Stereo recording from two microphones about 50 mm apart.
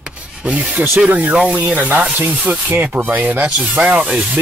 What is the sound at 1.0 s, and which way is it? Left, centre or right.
Speech, right.